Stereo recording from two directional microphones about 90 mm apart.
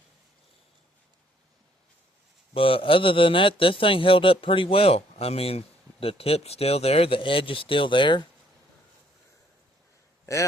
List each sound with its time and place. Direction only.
2.5 s a man's voice: 85° left; by 8.3 s 65° left (ahead or behind)